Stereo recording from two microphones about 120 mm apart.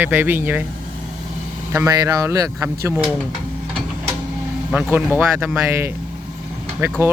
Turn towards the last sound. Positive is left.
turn(degrees=-20)  # may be behind; listen again after turning